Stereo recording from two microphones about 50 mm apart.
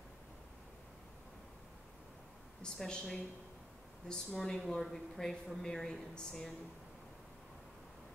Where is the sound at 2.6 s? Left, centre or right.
Centre.